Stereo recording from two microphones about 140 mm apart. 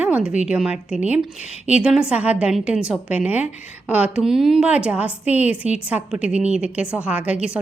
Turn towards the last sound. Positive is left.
turn(degrees=-10)  # may be behind; listen again after turning